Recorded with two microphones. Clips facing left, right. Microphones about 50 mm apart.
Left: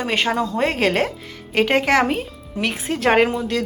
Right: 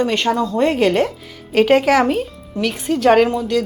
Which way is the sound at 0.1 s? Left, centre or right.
Centre.